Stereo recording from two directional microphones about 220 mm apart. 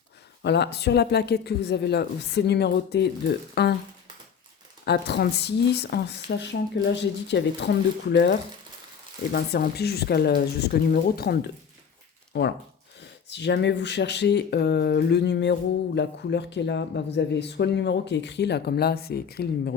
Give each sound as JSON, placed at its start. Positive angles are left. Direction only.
{"t": 0.4, "sound": "speech", "side_deg": 50}
{"t": 4.9, "sound": "speech", "side_deg": 50}